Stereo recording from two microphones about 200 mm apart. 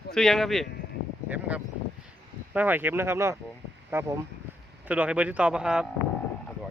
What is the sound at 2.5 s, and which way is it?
Speech, 10° right (ahead or behind).